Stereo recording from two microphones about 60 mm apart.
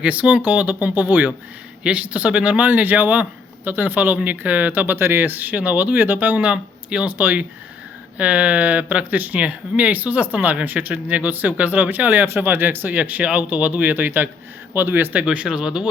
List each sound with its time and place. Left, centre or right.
0.0 s speech: right
15.2 s speech: right